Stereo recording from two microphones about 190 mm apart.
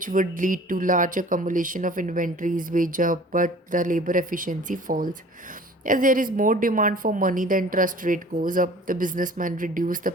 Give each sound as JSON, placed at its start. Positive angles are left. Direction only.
{"t": 0.0, "sound": "speech", "side_deg": -45}